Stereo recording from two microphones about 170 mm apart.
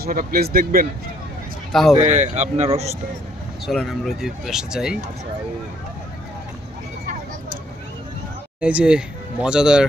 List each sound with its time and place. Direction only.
0.0 s speech: 60° right (ahead or behind)
1.7 s speech: centre (ahead or behind)
2.0 s speech: 45° right (ahead or behind)
3.7 s speech: centre (ahead or behind)
8.6 s speech: 5° right (ahead or behind)